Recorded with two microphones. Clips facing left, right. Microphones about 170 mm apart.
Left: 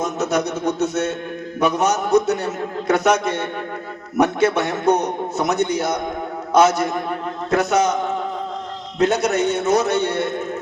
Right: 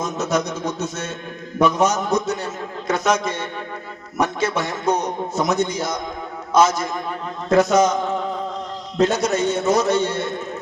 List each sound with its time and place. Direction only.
0.0 s a man's voice: 65° left (ahead or behind)
9.0 s a man's voice: 65° left (ahead or behind)